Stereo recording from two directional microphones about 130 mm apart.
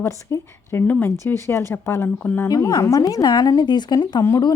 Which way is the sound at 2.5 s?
30° left (ahead or behind).